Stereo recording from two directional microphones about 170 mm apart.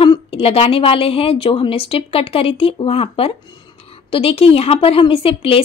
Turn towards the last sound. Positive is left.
turn(degrees=35)  # may be behind; listen again after turning